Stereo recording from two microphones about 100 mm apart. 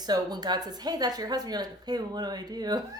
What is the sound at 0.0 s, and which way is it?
A woman's voice, 45° right (ahead or behind).